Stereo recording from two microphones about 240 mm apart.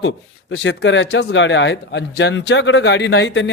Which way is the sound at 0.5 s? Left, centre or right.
Left.